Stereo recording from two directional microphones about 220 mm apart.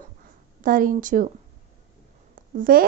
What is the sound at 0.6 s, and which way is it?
Speech, 40° right (ahead or behind).